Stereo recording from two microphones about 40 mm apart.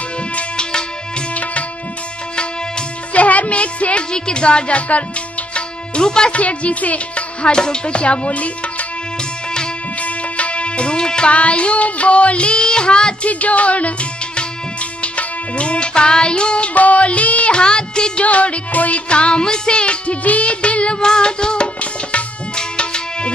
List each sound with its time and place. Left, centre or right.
0.6 s music: left
1.3 s tabla: left
3.1 s music: left
4.1 s child singing: left
5.5 s music: left
6.3 s music: left
7.5 s child singing: left
10.0 s music: left
11.3 s child singing: left
13.3 s music: left
16.7 s speech: left
17.6 s child singing: left
18.2 s child singing: left
22.6 s tabla: left